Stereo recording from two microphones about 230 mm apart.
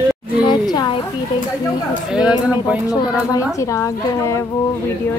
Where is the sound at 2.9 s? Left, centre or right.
Centre.